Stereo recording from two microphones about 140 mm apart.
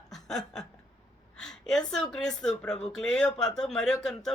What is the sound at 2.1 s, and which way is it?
Speech, 5° left (ahead or behind).